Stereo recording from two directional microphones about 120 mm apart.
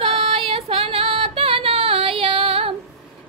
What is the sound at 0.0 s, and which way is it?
Female singing, 50° right (ahead or behind).